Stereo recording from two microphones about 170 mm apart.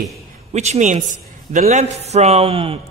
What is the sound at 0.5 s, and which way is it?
A man's voice, 40° right (ahead or behind).